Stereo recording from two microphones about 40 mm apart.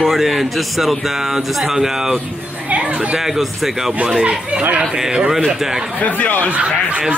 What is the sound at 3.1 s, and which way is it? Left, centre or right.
Speech, centre.